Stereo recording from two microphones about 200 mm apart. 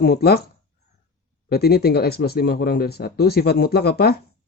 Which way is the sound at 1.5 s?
50° left (ahead or behind).